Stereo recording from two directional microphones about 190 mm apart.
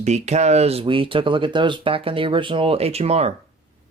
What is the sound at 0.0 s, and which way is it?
Speech, 35° right (ahead or behind).